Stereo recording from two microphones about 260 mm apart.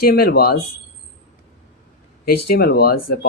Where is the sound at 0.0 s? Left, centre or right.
Left.